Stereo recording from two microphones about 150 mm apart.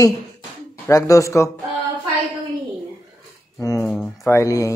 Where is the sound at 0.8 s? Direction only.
20° left (ahead or behind).